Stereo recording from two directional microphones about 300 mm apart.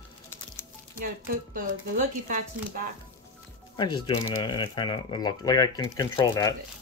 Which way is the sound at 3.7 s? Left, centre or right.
Centre.